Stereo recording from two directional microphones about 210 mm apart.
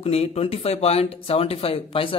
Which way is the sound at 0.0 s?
30° left (ahead or behind).